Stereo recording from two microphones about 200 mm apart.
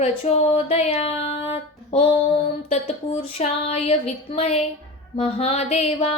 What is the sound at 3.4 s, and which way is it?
Speech, 30° left (ahead or behind).